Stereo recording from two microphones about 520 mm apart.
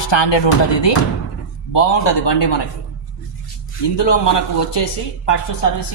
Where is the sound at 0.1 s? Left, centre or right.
Left.